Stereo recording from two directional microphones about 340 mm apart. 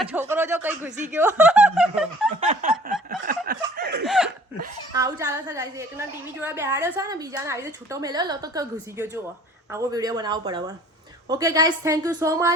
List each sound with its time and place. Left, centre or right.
0.1 s a woman's voice: centre
2.3 s snicker: right
4.0 s laughter: centre
4.9 s a woman's voice: centre